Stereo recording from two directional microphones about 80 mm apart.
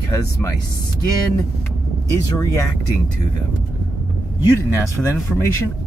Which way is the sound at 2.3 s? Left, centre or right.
Left.